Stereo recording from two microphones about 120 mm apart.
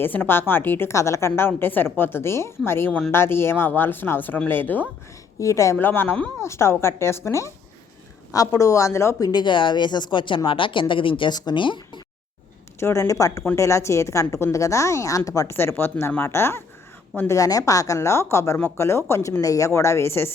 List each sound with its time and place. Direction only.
0.0 s a woman's voice: 15° left (ahead or behind)
9.3 s speech: 40° left (ahead or behind)
12.8 s a woman's voice: 25° left (ahead or behind)